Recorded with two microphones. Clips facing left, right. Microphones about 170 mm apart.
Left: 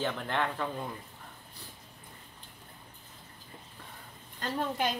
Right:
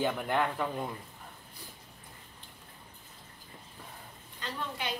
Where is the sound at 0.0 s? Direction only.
10° right (ahead or behind).